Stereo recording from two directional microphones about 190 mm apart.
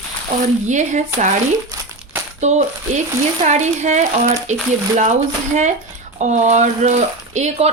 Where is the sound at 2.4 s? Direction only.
40° right (ahead or behind).